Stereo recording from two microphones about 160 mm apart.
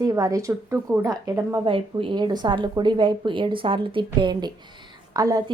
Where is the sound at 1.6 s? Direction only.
35° right (ahead or behind).